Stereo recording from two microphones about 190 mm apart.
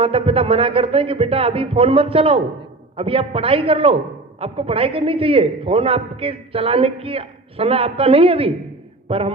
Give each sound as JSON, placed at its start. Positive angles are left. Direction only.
{"t": 0.0, "sound": "a man's voice", "side_deg": -30}